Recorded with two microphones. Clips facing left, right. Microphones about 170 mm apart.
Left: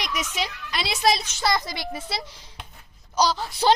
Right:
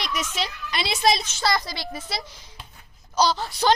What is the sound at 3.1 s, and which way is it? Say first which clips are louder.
Speech: right 1 dB; 10° left (ahead or behind).